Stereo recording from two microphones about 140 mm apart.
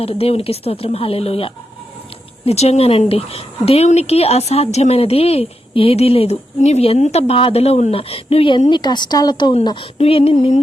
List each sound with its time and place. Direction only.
0.0 s a woman's voice: 45° left (ahead or behind)
10.0 s speech: 45° left (ahead or behind)